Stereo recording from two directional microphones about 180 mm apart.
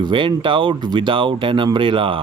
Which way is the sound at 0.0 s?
25° right (ahead or behind).